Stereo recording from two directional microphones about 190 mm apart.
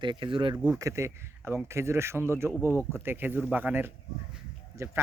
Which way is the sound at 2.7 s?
10° left (ahead or behind).